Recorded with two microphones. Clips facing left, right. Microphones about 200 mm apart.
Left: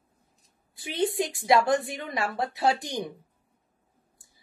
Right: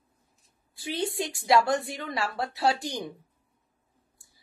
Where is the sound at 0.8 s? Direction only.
20° left (ahead or behind).